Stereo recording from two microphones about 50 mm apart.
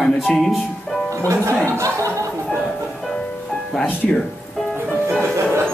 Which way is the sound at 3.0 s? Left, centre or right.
Centre.